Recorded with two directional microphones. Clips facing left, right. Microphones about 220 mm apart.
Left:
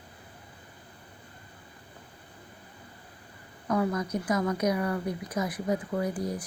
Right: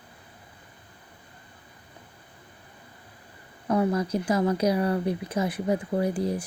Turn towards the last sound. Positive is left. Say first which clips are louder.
# right 4 dB
turn(degrees=-30)  # may be behind; listen again after turning